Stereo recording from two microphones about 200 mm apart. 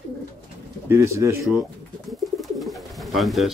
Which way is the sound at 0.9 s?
15° right (ahead or behind).